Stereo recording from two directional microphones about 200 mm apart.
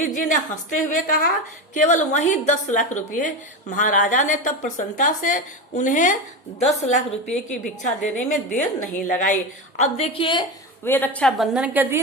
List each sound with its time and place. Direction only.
0.0 s a woman's voice: 40° left (ahead or behind)
10.8 s a woman's voice: 10° left (ahead or behind); by 11.9 s 10° right (ahead or behind)